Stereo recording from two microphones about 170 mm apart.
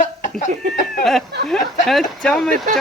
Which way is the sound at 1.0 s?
Centre (ahead or behind).